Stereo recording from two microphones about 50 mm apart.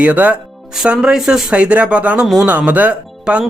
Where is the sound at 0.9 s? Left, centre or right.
Centre.